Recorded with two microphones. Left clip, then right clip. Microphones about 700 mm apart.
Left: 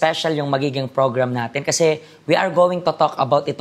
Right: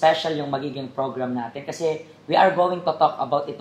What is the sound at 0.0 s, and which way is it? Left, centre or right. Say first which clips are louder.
Speech: left 1 dB; left.